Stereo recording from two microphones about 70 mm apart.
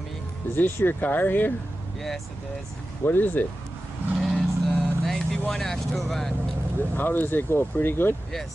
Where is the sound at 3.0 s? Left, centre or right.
Left.